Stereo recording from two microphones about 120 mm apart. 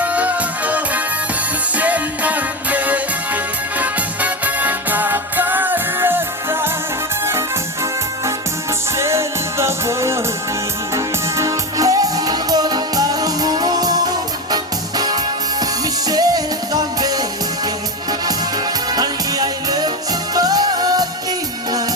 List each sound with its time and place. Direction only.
0.0 s music: 10° right (ahead or behind)
9.0 s music: 25° right (ahead or behind)
18.9 s music: 35° right (ahead or behind)